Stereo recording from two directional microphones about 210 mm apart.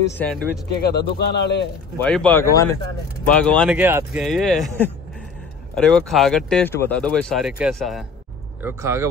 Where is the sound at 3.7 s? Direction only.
10° right (ahead or behind).